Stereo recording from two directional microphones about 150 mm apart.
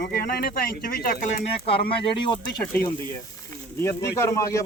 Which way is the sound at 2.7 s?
15° left (ahead or behind).